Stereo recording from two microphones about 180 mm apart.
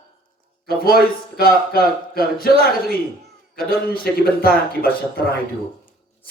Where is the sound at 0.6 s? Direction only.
55° left (ahead or behind).